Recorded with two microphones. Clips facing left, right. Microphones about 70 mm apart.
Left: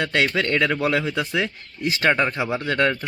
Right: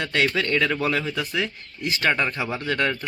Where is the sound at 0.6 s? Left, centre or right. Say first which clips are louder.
Left 2 dB; left.